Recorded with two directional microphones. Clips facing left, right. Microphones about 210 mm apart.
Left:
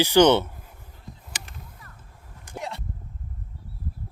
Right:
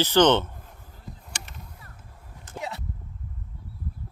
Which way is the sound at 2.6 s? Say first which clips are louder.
Even; centre (ahead or behind).